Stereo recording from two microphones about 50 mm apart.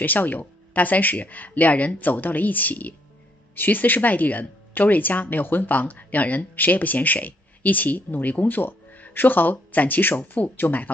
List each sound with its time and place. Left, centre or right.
0.0 s speech: left